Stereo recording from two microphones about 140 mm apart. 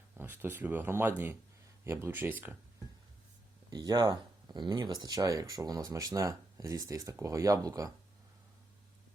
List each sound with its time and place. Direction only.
0.2 s speech: 15° right (ahead or behind)
3.7 s speech: 30° right (ahead or behind)